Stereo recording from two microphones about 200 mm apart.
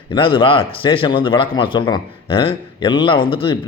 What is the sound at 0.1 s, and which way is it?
Speech, 25° left (ahead or behind).